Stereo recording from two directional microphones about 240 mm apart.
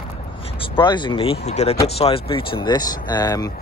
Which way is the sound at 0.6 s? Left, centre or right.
Centre.